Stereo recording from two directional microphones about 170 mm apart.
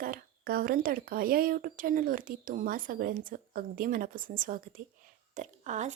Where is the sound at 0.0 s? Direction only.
60° right (ahead or behind).